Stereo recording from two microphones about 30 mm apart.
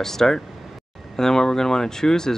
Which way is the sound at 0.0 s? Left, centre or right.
Centre.